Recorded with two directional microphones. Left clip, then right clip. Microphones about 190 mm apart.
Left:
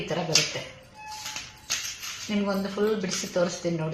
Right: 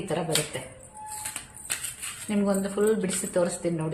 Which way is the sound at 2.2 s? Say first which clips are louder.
Right 2 dB; 30° right (ahead or behind).